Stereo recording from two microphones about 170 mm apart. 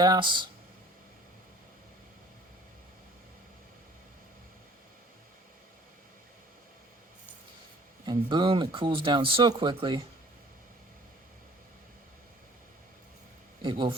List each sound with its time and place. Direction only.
0.0 s speech: 25° right (ahead or behind)
8.0 s speech: 25° right (ahead or behind)
13.6 s a man's voice: 30° right (ahead or behind)